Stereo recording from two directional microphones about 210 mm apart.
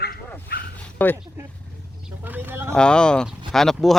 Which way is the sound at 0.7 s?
10° left (ahead or behind).